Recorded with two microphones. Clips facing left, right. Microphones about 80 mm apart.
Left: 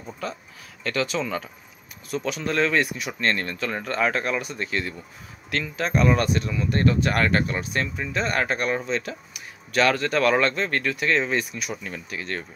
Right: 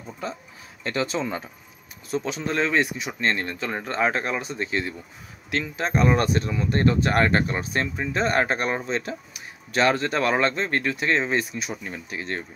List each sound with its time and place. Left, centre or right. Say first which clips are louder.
0.2 s speech: even; right
5.9 s speech: even; right